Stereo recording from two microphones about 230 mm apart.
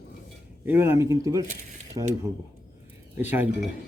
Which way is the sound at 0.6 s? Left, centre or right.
Centre.